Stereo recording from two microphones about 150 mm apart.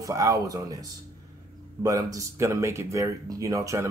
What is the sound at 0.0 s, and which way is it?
Speech, 20° right (ahead or behind).